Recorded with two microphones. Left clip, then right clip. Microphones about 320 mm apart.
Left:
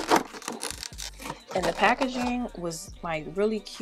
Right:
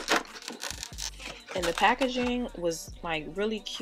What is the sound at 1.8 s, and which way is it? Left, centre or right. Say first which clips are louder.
Speech: even; left.